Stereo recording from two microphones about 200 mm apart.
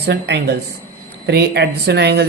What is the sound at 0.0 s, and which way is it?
Speech, 55° right (ahead or behind).